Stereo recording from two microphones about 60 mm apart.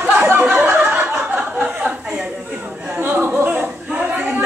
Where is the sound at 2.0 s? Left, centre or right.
Centre.